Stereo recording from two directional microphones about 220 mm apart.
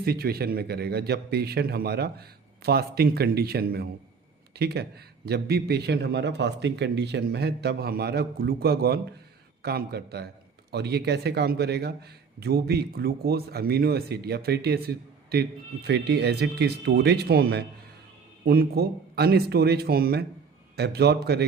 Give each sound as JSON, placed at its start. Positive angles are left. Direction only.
{"t": 0.0, "sound": "a man's voice", "side_deg": -45}